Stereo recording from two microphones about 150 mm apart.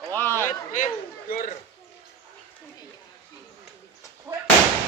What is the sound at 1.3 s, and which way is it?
Speech, 70° left (ahead or behind).